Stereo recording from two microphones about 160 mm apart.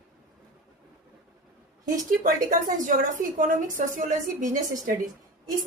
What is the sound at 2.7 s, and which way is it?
A woman's voice, 55° right (ahead or behind).